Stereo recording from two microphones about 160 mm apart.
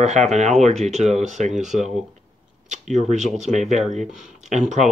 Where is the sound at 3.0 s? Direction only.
50° right (ahead or behind).